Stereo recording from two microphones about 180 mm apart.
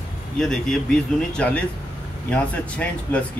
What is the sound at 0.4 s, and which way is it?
Speech, 5° left (ahead or behind).